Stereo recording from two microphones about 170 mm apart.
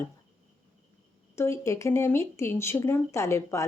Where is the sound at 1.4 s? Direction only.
15° left (ahead or behind).